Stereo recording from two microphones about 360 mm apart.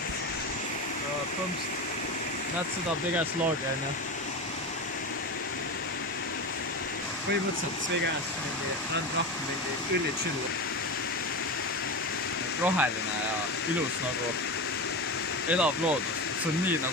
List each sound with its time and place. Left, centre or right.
12.6 s speech: centre
15.4 s speech: centre